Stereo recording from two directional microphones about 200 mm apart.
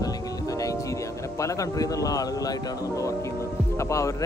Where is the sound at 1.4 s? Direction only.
15° left (ahead or behind).